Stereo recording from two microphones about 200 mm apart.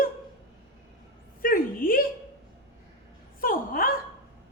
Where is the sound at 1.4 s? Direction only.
45° left (ahead or behind).